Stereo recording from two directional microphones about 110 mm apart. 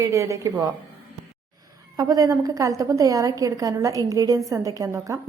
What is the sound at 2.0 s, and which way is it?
A woman's voice, 35° right (ahead or behind).